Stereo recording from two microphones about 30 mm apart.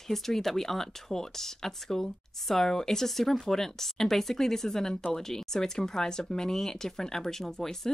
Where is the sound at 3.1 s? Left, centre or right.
Centre.